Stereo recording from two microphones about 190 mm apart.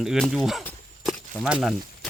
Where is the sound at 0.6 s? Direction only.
5° left (ahead or behind).